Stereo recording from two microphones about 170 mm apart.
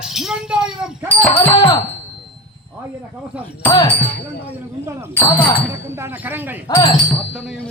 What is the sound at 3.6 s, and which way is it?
Speech, 10° left (ahead or behind).